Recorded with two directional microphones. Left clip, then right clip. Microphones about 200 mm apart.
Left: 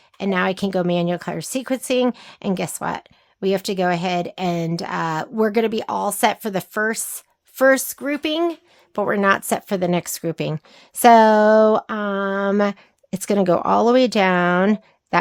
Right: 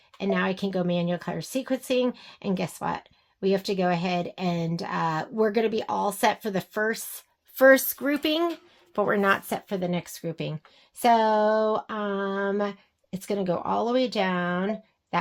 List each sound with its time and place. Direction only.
0.2 s speech: 35° left (ahead or behind); by 15.2 s 55° left (ahead or behind)